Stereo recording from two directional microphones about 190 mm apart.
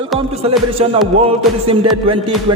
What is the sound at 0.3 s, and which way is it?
Speech, 30° right (ahead or behind).